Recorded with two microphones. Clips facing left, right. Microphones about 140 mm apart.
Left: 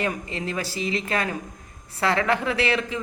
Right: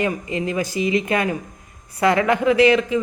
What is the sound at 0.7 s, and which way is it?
Speech, 30° left (ahead or behind).